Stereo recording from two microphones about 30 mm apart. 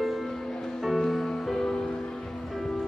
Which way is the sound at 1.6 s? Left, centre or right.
Left.